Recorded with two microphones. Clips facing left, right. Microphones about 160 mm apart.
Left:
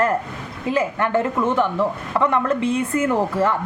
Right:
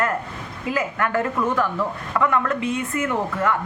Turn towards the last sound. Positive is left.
turn(degrees=30)  # may be behind; listen again after turning